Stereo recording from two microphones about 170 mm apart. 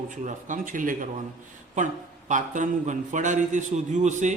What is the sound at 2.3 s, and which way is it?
A man's voice, 50° right (ahead or behind).